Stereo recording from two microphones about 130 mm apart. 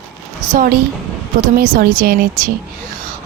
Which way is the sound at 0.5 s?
90° right.